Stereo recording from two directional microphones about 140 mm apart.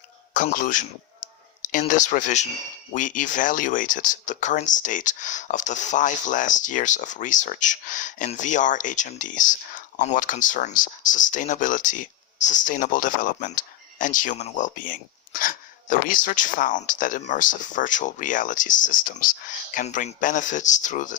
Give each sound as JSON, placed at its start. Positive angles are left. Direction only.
{"t": 0.5, "sound": "a man's voice", "side_deg": 70}
{"t": 1.9, "sound": "speech", "side_deg": 65}